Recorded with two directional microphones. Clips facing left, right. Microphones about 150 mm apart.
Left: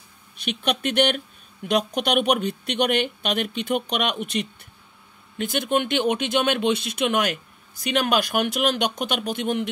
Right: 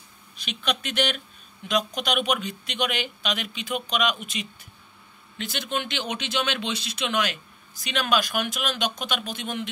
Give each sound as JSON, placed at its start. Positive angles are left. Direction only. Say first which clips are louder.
{"t": 0.5, "sound": "speech", "louder": "left 5 dB", "side_deg": 55}
{"t": 5.4, "sound": "speech", "louder": "left 7 dB", "side_deg": 50}